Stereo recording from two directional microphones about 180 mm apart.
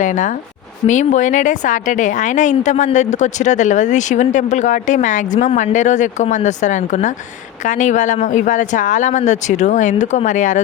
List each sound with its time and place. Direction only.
0.0 s a woman's voice: 45° left (ahead or behind)